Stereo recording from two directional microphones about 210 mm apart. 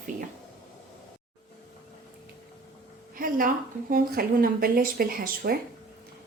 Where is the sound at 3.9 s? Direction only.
45° right (ahead or behind).